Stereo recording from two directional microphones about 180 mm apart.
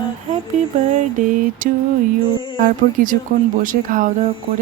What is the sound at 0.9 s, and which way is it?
Speech, 50° right (ahead or behind).